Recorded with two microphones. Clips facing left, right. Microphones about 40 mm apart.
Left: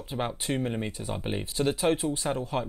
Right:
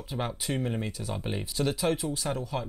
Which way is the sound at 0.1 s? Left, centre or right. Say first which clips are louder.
Left 2 dB; centre.